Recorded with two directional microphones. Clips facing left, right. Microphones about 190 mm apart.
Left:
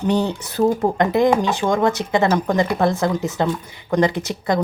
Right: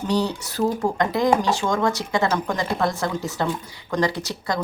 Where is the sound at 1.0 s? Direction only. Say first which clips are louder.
Left 3 dB; 20° left (ahead or behind).